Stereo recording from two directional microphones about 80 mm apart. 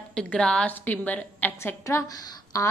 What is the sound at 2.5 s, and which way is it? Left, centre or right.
Speech, left.